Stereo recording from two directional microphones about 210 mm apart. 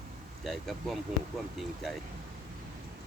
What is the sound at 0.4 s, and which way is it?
Speech, centre (ahead or behind).